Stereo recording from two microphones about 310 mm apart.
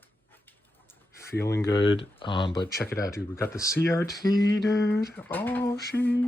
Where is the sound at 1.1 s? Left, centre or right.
Centre.